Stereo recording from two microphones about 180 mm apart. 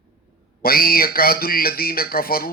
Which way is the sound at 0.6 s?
55° left (ahead or behind).